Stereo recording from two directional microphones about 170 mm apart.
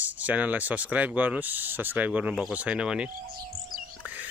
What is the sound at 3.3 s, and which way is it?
Insect, 60° right (ahead or behind).